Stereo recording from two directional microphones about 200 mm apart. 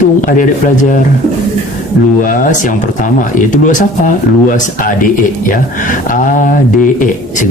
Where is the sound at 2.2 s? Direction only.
40° left (ahead or behind).